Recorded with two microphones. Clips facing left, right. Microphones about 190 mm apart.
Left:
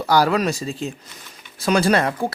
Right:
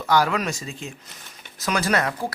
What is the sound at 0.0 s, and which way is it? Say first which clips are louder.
Speech: left 4 dB; 35° left (ahead or behind).